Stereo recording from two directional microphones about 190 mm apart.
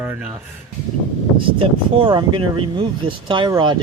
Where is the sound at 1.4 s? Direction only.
25° right (ahead or behind).